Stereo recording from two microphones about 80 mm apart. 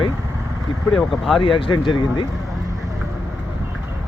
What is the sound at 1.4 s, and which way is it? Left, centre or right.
Speech, left.